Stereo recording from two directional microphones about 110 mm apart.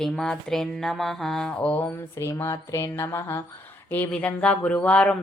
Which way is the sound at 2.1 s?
25° left (ahead or behind).